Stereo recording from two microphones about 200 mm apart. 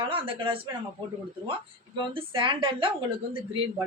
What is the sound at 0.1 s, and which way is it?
Speech, 25° right (ahead or behind).